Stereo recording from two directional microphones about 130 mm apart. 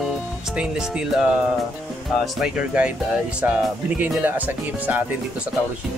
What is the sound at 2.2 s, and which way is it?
Speech, 5° right (ahead or behind).